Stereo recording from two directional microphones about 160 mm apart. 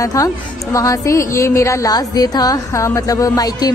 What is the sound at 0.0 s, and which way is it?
A woman's voice, 20° left (ahead or behind).